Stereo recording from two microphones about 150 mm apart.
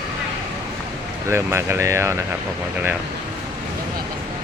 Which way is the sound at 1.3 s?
15° right (ahead or behind).